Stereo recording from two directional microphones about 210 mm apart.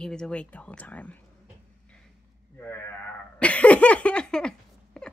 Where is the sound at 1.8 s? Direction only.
5° left (ahead or behind).